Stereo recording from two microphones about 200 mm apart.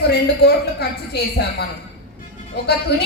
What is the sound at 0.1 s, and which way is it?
A man's voice, 55° left (ahead or behind).